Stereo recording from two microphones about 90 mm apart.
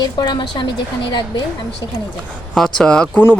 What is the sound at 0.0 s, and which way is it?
Speech, 50° left (ahead or behind).